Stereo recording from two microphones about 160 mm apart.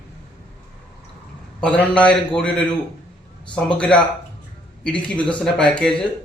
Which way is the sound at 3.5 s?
5° left (ahead or behind).